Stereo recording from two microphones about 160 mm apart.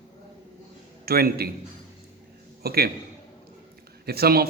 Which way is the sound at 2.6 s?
75° right (ahead or behind).